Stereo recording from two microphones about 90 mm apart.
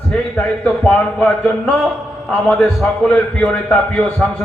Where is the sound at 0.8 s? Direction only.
15° left (ahead or behind).